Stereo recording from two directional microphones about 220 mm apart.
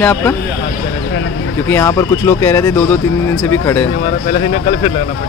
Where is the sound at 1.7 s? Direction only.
10° left (ahead or behind).